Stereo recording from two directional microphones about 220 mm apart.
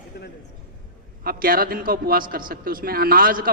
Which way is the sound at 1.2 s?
40° right (ahead or behind).